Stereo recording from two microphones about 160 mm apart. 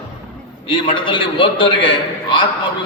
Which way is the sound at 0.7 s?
30° left (ahead or behind).